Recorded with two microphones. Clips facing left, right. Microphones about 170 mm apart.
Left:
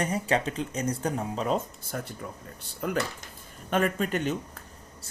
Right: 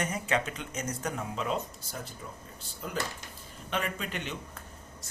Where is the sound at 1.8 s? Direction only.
55° left (ahead or behind).